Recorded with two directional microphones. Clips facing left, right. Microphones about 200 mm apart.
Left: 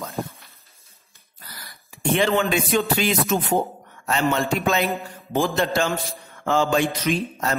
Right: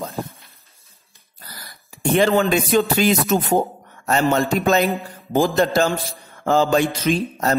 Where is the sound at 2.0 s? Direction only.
40° right (ahead or behind).